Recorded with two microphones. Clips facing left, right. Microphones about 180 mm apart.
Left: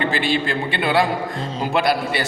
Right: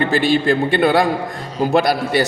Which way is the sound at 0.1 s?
45° right (ahead or behind).